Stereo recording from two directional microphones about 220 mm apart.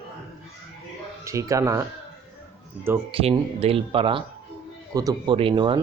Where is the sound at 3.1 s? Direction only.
25° right (ahead or behind).